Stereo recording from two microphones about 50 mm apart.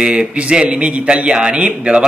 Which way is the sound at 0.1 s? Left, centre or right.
Right.